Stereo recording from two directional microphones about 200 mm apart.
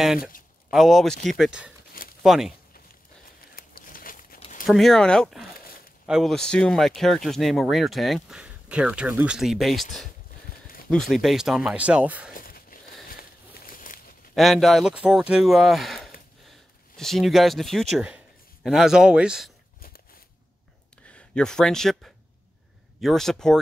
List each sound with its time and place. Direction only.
0.7 s speech: centre (ahead or behind)
3.3 s a sound: 45° left (ahead or behind)
4.6 s speech: centre (ahead or behind)
10.9 s speech: centre (ahead or behind)
12.4 s a sound: 45° left (ahead or behind)
14.3 s speech: centre (ahead or behind)
21.1 s speech: 5° left (ahead or behind)